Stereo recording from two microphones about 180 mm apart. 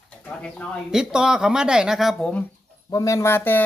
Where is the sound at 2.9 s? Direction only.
20° left (ahead or behind).